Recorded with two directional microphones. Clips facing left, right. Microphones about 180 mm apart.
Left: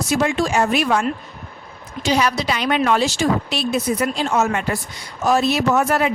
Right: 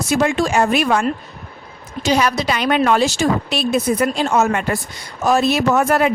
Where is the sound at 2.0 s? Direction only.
45° right (ahead or behind).